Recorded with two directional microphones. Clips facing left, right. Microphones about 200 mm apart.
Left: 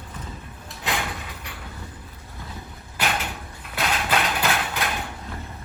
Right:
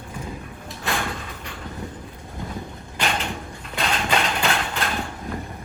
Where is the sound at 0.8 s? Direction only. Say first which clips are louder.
Right 1 dB; 15° left (ahead or behind).